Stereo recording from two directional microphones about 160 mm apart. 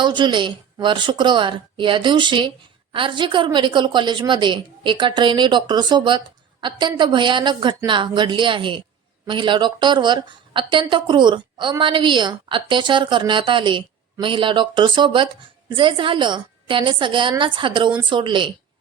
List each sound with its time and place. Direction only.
0.0 s a woman's voice: 30° right (ahead or behind)